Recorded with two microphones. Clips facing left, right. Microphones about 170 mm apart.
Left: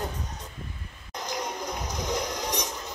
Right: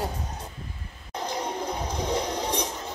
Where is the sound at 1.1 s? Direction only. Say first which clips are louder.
Right 3 dB; 30° right (ahead or behind).